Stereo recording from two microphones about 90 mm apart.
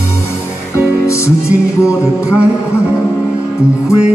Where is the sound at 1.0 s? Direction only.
30° left (ahead or behind).